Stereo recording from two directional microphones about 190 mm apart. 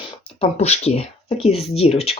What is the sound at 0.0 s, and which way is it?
Speech, 35° left (ahead or behind).